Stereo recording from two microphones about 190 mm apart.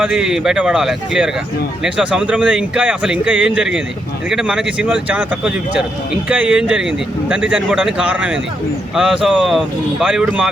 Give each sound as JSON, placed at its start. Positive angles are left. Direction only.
{"t": 0.0, "sound": "speech", "side_deg": -5}